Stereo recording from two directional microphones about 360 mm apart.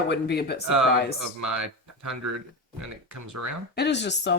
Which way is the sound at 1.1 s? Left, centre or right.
Right.